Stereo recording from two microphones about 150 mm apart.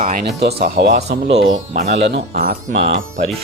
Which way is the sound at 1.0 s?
50° right (ahead or behind).